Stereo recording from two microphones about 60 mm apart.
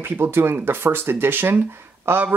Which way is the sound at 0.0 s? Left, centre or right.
Right.